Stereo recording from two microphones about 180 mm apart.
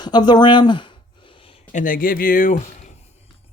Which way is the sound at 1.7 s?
45° left (ahead or behind).